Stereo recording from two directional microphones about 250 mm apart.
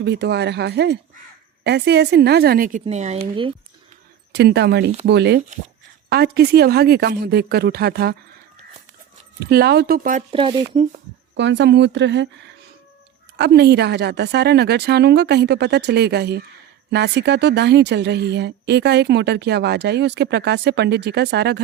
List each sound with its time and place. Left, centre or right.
0.0 s a woman's voice: right
4.3 s a woman's voice: right
9.4 s a woman's voice: right; by 10.8 s centre
11.3 s a woman's voice: right